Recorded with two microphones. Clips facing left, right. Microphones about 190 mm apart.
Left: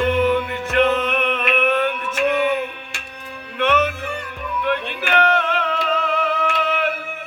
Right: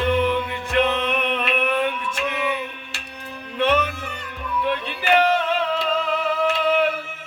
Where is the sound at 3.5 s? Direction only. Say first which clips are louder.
Left 1 dB; 55° left (ahead or behind).